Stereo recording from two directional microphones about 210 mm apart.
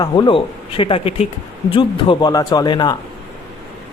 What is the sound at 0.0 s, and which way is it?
Mantra, 20° left (ahead or behind).